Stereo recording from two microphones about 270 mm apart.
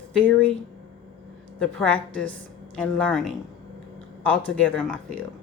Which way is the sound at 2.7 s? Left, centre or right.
Centre.